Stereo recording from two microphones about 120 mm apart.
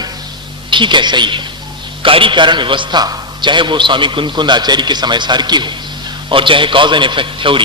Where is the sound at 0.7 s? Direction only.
40° right (ahead or behind).